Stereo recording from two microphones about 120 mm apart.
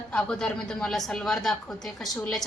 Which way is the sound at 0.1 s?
5° left (ahead or behind).